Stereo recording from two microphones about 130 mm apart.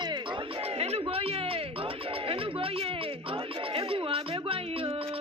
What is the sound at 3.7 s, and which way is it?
Music, 45° right (ahead or behind).